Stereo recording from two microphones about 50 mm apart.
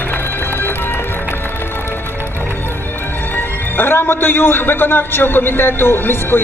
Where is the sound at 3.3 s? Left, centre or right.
Left.